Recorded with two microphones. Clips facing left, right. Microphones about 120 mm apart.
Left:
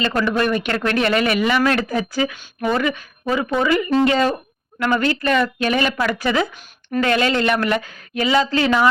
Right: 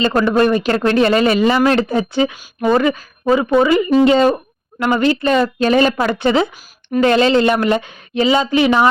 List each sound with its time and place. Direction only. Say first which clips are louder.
0.1 s speech: right 5 dB; 35° right (ahead or behind)